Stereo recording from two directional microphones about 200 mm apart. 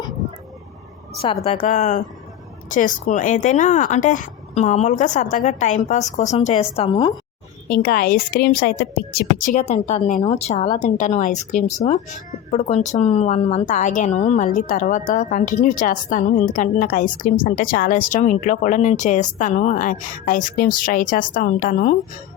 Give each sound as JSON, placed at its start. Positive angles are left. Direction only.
{"t": 1.5, "sound": "a woman's voice", "side_deg": 35}
{"t": 7.7, "sound": "a woman's voice", "side_deg": 50}